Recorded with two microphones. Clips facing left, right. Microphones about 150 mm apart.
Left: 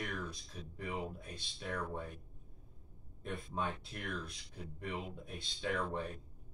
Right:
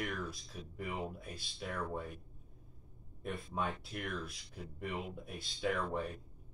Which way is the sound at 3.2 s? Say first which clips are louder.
Right 1 dB; 5° right (ahead or behind).